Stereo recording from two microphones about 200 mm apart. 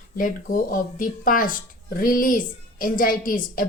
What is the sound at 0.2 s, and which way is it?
Speech, 40° left (ahead or behind).